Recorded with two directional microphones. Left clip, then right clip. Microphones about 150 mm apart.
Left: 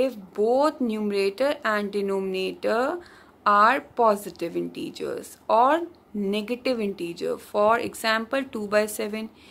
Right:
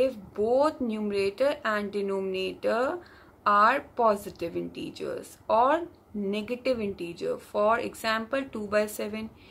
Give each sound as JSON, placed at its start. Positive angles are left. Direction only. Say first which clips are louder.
{"t": 0.0, "sound": "speech", "louder": "left 3 dB", "side_deg": 45}